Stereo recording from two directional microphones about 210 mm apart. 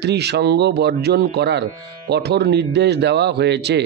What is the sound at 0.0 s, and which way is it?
Speech, 50° right (ahead or behind).